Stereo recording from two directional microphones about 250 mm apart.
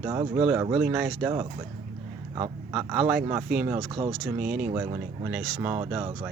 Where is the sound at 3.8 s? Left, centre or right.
Centre.